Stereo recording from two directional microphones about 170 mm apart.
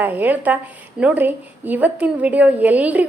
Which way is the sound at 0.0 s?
10° right (ahead or behind).